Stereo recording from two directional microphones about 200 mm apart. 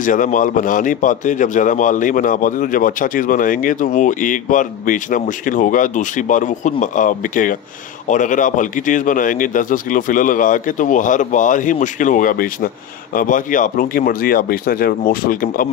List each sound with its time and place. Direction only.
0.0 s a man's voice: 40° left (ahead or behind)